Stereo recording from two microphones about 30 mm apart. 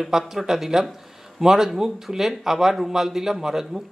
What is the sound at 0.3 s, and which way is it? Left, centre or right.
Speech, centre.